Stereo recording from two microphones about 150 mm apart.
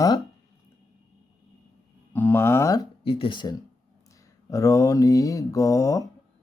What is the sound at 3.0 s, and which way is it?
Speech, 35° left (ahead or behind).